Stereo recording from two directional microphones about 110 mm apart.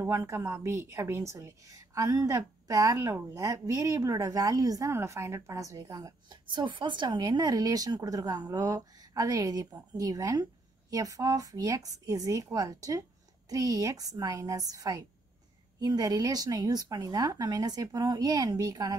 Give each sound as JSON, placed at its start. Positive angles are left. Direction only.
{"t": 0.0, "sound": "a woman's voice", "side_deg": -25}
{"t": 6.2, "sound": "speech", "side_deg": -45}